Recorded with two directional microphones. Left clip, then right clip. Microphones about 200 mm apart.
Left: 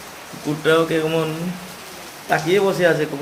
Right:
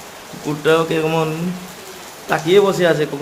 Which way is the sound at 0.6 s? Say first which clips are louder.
Right 2 dB; 15° right (ahead or behind).